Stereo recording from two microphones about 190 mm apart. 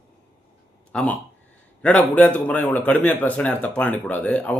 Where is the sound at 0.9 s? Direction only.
5° left (ahead or behind).